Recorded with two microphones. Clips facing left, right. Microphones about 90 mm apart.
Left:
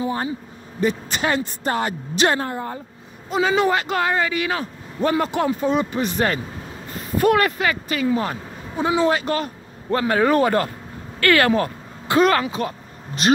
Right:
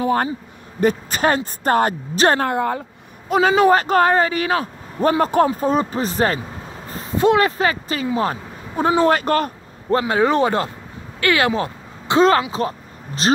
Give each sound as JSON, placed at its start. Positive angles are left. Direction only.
{"t": 0.0, "sound": "speech", "side_deg": -55}
{"t": 0.7, "sound": "a woman's voice", "side_deg": -45}
{"t": 2.4, "sound": "speech", "side_deg": -80}
{"t": 3.3, "sound": "speech", "side_deg": -50}
{"t": 8.7, "sound": "a woman's voice", "side_deg": -50}
{"t": 9.8, "sound": "speech", "side_deg": -25}